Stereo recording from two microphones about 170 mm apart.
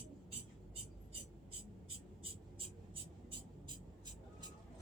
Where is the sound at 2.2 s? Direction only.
30° right (ahead or behind).